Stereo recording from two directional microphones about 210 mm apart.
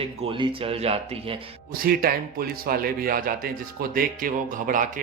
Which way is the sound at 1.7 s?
45° right (ahead or behind).